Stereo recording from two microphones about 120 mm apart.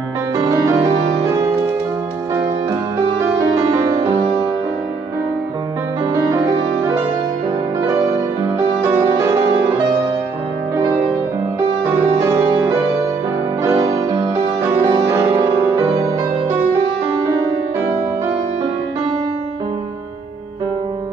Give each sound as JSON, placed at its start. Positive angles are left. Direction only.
{"t": 3.8, "sound": "music", "side_deg": -35}
{"t": 12.2, "sound": "music", "side_deg": -25}
{"t": 13.7, "sound": "music", "side_deg": -30}